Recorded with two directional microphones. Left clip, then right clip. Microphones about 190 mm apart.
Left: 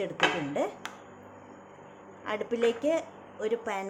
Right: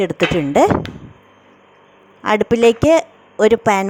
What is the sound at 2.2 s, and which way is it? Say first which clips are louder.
Speech: right 16 dB; 55° right (ahead or behind).